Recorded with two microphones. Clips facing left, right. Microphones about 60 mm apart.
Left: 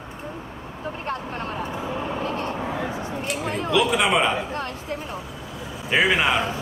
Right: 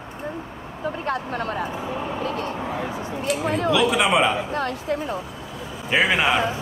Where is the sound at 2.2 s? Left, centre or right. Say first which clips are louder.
Even; left.